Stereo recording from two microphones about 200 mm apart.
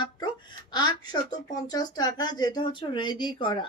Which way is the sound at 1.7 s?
20° left (ahead or behind).